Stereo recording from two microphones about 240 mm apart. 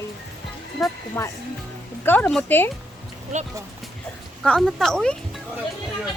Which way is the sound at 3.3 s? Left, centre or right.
Right.